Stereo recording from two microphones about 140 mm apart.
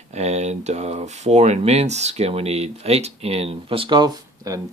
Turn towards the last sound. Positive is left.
turn(degrees=-30)  # may be behind; listen again after turning